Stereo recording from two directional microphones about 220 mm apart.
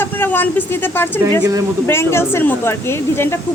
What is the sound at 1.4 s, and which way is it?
Speech, 15° right (ahead or behind).